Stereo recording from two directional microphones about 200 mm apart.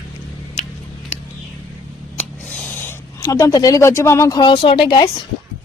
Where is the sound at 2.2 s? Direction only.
10° left (ahead or behind).